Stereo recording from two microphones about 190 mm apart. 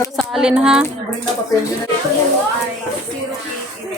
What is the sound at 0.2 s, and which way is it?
Speech, 5° right (ahead or behind).